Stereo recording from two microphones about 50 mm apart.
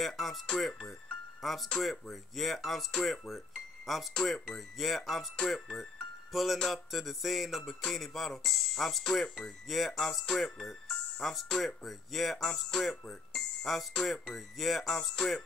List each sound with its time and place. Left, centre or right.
0.0 s speech: centre